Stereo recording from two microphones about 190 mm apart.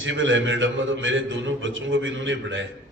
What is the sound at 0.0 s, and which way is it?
A man's voice, 80° right.